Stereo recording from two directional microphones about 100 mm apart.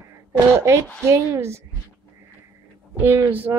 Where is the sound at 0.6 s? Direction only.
30° right (ahead or behind).